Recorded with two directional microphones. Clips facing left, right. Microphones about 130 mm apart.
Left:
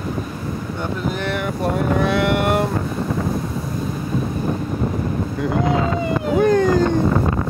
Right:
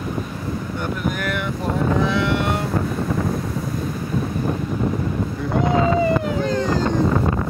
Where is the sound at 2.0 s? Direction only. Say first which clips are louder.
Left 2 dB; 60° left (ahead or behind).